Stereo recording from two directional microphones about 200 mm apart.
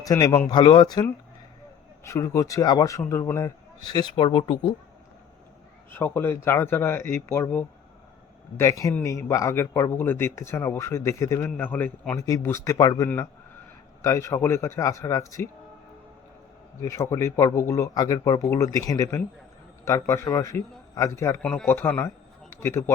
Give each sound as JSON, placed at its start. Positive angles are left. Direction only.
{"t": 0.0, "sound": "speech", "side_deg": 15}
{"t": 2.0, "sound": "speech", "side_deg": 15}
{"t": 5.9, "sound": "speech", "side_deg": 10}
{"t": 16.8, "sound": "speech", "side_deg": 15}